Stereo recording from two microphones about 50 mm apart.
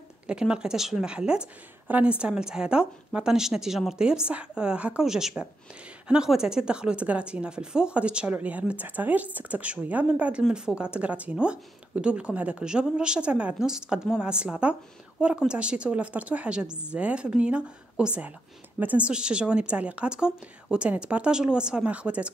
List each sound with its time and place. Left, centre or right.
0.3 s a woman's voice: centre
1.0 s speech: centre
1.9 s speech: right
2.1 s a woman's voice: centre
5.0 s a woman's voice: centre; by 12.6 s right
12.6 s a woman's voice: centre
18.8 s speech: right
19.0 s speech: centre
20.1 s a woman's voice: centre